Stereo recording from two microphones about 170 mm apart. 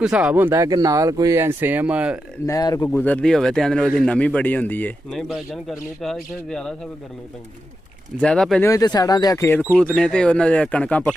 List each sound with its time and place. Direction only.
0.0 s speech: 5° right (ahead or behind)
2.4 s speech: 20° left (ahead or behind)
2.9 s a man's voice: 5° left (ahead or behind)
5.3 s a man's voice: centre (ahead or behind)
8.2 s a man's voice: 5° left (ahead or behind)
8.6 s speech: 20° left (ahead or behind)
9.8 s a man's voice: 5° left (ahead or behind)